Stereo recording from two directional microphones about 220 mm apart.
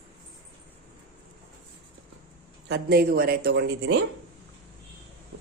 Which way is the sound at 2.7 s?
50° right (ahead or behind).